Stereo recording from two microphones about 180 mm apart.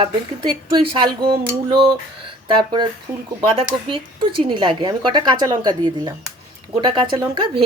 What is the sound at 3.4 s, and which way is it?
Speech, 30° right (ahead or behind).